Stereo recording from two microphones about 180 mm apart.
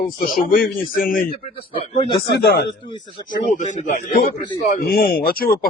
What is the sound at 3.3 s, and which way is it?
Speech, 45° left (ahead or behind).